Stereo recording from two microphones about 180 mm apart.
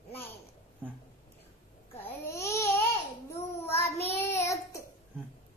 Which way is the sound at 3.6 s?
15° left (ahead or behind).